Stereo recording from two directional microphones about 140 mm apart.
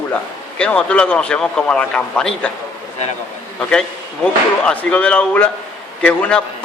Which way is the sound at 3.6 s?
5° left (ahead or behind).